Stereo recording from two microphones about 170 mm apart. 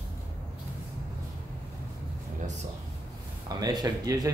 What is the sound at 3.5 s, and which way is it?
Music, 25° right (ahead or behind).